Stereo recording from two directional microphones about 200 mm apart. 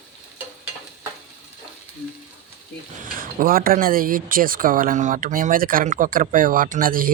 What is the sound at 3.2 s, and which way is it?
Speech, 45° right (ahead or behind).